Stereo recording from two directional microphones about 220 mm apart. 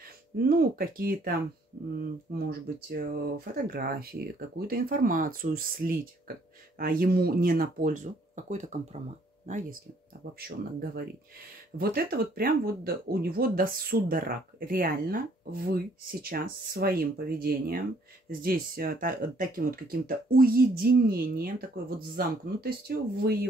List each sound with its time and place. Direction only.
0.4 s speech: 45° right (ahead or behind)
2.3 s speech: 45° right (ahead or behind)
11.8 s speech: 40° right (ahead or behind)